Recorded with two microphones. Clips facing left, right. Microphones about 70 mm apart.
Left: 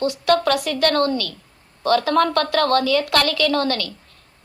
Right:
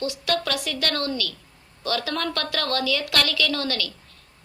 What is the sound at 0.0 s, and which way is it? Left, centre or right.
A woman's voice, left.